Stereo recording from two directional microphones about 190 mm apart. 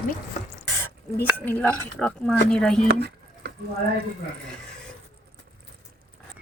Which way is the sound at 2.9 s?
55° right (ahead or behind).